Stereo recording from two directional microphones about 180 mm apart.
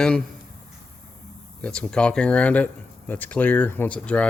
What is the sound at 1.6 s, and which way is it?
Speech, 5° left (ahead or behind).